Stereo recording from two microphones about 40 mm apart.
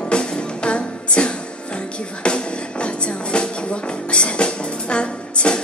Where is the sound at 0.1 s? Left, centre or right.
Left.